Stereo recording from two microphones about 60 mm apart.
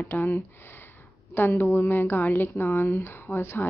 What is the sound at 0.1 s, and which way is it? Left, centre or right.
Speech, left.